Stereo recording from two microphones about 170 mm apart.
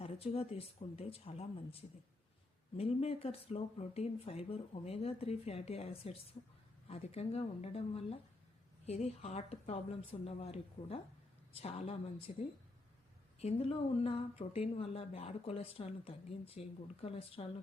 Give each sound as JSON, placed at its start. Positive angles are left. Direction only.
{"t": 0.0, "sound": "speech", "side_deg": 35}